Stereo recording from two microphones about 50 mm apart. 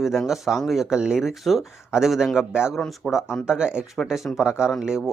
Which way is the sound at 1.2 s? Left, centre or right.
Centre.